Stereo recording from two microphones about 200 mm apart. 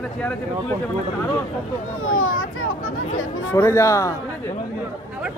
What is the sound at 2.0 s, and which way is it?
Speech, 90° left.